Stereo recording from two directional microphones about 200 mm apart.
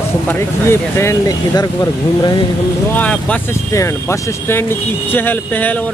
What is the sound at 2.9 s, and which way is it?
Speech, 5° left (ahead or behind).